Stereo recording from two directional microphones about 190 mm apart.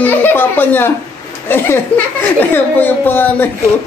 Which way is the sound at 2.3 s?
10° left (ahead or behind).